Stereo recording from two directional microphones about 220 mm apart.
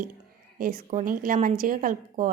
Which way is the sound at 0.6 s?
40° right (ahead or behind).